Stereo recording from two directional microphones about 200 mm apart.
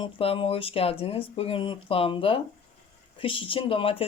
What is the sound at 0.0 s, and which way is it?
Speech, 25° left (ahead or behind).